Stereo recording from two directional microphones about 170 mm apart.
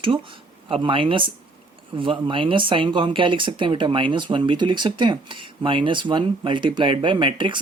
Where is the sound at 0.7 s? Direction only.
30° right (ahead or behind).